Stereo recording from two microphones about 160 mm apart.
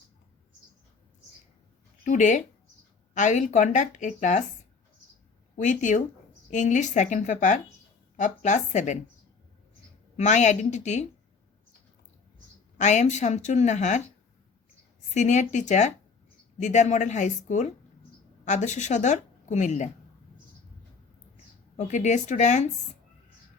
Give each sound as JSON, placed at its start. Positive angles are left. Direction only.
{"t": 2.0, "sound": "a woman's voice", "side_deg": 50}
{"t": 5.5, "sound": "a woman's voice", "side_deg": 50}
{"t": 10.2, "sound": "a woman's voice", "side_deg": 45}
{"t": 12.7, "sound": "a woman's voice", "side_deg": 45}
{"t": 15.1, "sound": "a woman's voice", "side_deg": 45}
{"t": 21.8, "sound": "a woman's voice", "side_deg": 45}